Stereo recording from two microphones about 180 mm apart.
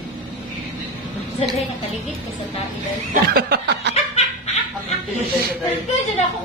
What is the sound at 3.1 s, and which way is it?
Snicker, 60° right (ahead or behind).